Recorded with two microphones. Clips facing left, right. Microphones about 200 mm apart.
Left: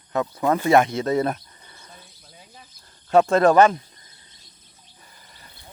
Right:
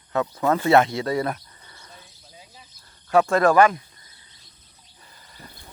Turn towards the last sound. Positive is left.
turn(degrees=25)  # may be behind; listen again after turning